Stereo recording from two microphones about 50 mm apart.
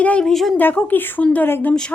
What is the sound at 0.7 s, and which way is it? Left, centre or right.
Speech, left.